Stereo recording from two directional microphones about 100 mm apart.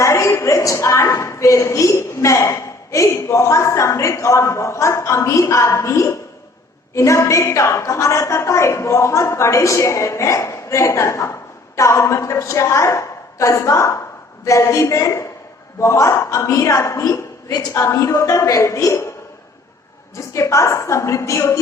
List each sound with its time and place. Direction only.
0.0 s a woman's voice: 30° left (ahead or behind)
20.1 s a woman's voice: 30° left (ahead or behind)